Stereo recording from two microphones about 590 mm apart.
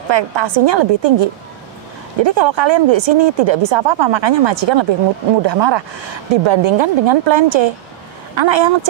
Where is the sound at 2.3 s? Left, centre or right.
Right.